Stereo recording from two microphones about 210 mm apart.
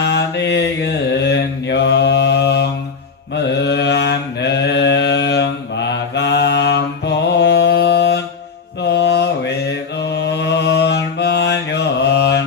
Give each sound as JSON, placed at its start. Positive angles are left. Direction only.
{"t": 0.0, "sound": "mantra", "side_deg": 55}